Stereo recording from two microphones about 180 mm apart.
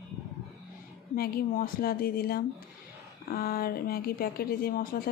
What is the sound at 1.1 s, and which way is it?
A woman's voice, 55° left (ahead or behind).